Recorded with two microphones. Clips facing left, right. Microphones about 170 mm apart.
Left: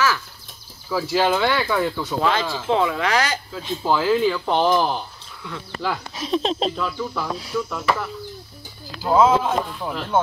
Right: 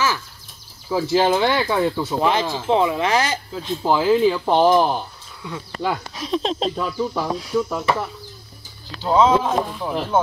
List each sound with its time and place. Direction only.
0.8 s speech: 25° right (ahead or behind)
6.1 s speech: 5° left (ahead or behind)
6.8 s speech: 30° right (ahead or behind)
9.0 s speech: 5° left (ahead or behind)